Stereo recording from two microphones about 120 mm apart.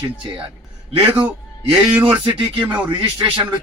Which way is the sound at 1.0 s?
10° right (ahead or behind).